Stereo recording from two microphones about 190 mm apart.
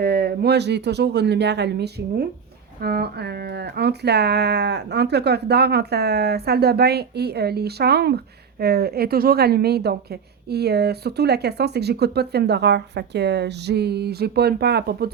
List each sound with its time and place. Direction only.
0.0 s speech: 55° right (ahead or behind)